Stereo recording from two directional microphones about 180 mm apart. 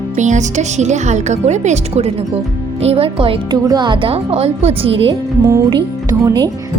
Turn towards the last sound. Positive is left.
turn(degrees=-20)  # may be behind; listen again after turning